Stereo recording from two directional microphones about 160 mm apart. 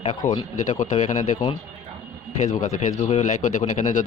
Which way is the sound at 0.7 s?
50° left (ahead or behind).